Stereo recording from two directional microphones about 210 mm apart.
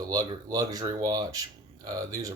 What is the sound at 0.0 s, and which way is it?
Speech, 20° right (ahead or behind).